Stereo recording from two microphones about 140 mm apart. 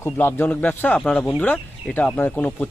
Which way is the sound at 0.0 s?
15° left (ahead or behind).